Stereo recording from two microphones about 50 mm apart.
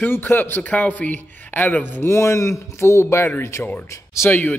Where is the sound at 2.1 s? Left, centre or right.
Left.